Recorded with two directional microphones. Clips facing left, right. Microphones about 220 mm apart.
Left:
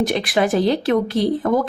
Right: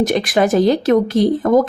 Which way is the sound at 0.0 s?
45° right (ahead or behind).